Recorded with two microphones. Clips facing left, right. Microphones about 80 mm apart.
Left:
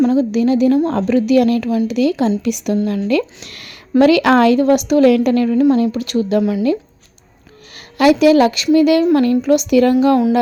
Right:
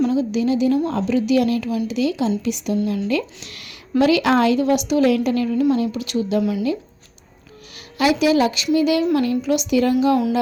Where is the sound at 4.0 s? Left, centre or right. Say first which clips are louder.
Left 5 dB; left.